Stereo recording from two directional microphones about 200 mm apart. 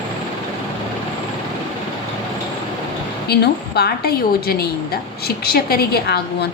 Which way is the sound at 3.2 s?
55° left (ahead or behind).